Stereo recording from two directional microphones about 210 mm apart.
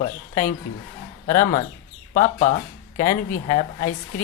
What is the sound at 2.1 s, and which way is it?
Speech, 40° left (ahead or behind).